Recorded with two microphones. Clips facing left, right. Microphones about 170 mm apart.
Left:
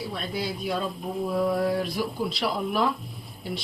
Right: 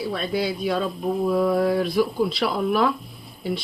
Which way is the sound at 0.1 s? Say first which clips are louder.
Right 6 dB; 80° right.